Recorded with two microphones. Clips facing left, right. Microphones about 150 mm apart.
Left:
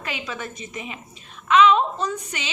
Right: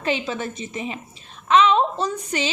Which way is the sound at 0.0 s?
30° right (ahead or behind).